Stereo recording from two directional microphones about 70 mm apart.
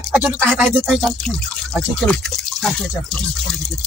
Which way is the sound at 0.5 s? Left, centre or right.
Centre.